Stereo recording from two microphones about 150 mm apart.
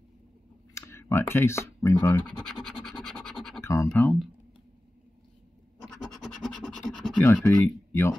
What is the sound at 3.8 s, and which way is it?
Speech, 10° left (ahead or behind).